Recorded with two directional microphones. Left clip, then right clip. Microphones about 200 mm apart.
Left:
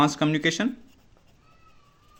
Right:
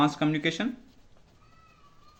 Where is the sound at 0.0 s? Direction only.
40° left (ahead or behind).